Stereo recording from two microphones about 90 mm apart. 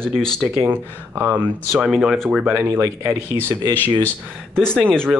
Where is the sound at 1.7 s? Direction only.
Centre (ahead or behind).